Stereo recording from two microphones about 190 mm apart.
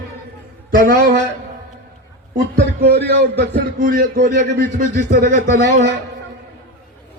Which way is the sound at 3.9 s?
45° right (ahead or behind).